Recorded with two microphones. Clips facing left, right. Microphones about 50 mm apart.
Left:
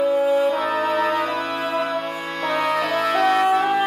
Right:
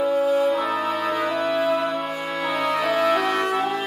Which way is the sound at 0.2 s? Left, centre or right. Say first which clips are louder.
Left 1 dB; centre.